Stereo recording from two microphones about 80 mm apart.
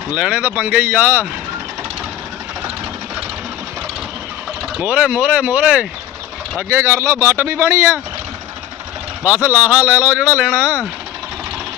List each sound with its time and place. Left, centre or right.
0.1 s speech: centre
4.8 s speech: centre
6.7 s speech: right
9.4 s speech: right